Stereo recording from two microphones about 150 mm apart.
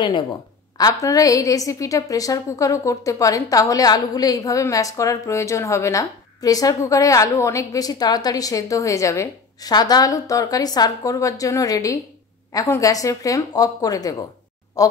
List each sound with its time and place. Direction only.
0.7 s a woman's voice: 25° left (ahead or behind)